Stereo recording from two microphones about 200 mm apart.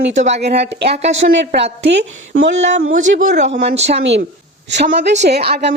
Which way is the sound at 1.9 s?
65° right (ahead or behind).